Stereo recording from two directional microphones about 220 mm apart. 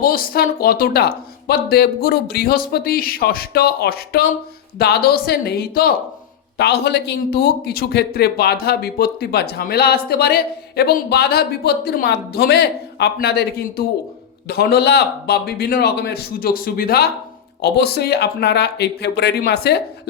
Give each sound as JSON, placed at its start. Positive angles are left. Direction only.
{"t": 0.0, "sound": "speech", "side_deg": 40}